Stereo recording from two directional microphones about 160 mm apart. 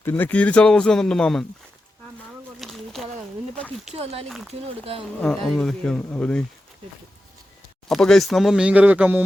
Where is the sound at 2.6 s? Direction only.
Centre (ahead or behind).